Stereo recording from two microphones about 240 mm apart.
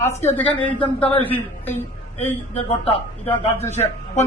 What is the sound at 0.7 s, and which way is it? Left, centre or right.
Speech, left.